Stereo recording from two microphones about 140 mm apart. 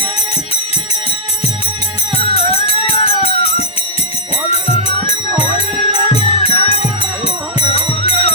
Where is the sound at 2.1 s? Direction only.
45° left (ahead or behind).